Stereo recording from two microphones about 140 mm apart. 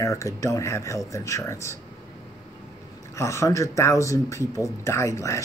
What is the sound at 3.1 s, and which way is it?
Speech, 20° left (ahead or behind).